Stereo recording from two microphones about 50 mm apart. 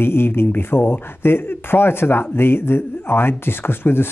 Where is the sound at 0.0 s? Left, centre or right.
Left.